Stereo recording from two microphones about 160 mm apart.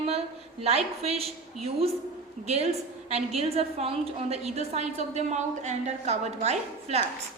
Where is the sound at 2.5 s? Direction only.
40° right (ahead or behind).